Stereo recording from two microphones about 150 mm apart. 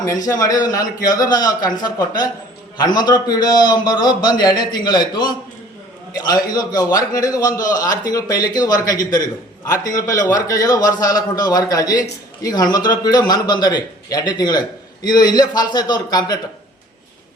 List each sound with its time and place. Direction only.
0.0 s a man's voice: 20° left (ahead or behind)